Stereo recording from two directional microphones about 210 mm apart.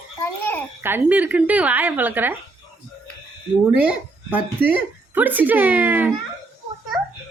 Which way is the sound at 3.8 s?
5° right (ahead or behind).